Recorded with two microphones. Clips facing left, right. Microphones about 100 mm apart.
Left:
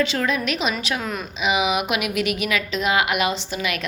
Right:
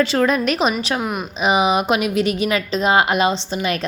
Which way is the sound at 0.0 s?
40° right (ahead or behind).